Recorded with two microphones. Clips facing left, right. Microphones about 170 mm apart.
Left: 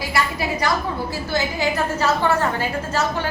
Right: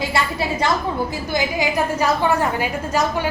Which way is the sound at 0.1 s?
25° right (ahead or behind).